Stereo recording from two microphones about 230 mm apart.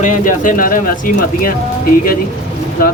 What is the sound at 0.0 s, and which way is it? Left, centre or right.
Speech, left.